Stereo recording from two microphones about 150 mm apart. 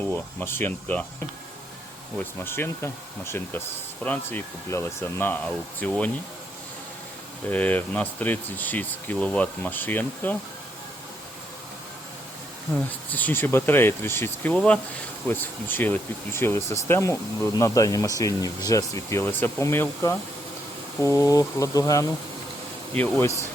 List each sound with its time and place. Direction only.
0.1 s speech: 15° left (ahead or behind)
2.1 s speech: 15° left (ahead or behind)
7.5 s speech: 10° left (ahead or behind)
12.9 s speech: 10° left (ahead or behind)